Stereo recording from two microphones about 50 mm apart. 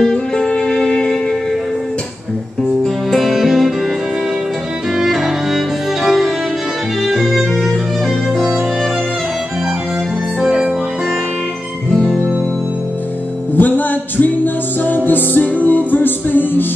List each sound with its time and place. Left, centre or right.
0.0 s music: centre
3.1 s music: centre
4.9 s music: centre
10.4 s music: centre
13.6 s music: left